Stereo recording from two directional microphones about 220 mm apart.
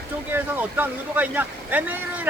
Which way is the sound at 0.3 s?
10° right (ahead or behind).